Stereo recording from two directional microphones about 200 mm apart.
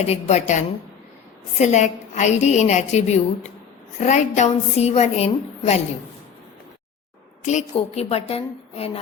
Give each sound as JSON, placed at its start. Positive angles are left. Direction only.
{"t": 0.0, "sound": "a woman's voice", "side_deg": 35}
{"t": 7.4, "sound": "a woman's voice", "side_deg": 35}